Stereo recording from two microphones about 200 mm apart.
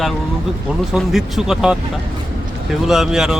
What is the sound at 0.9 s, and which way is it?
Speech, centre (ahead or behind).